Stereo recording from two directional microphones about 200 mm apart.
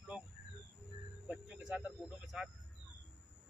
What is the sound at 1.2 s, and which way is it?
Cricket, 5° right (ahead or behind).